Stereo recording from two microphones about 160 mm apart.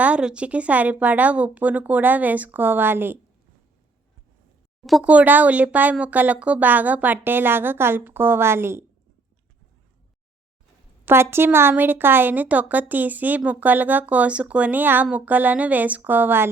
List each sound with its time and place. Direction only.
0.0 s a woman's voice: 5° right (ahead or behind)
4.8 s a woman's voice: centre (ahead or behind); by 8.8 s 15° right (ahead or behind)
11.0 s a woman's voice: 15° right (ahead or behind)